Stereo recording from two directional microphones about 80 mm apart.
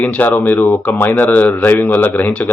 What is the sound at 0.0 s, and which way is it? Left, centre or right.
Speech, centre.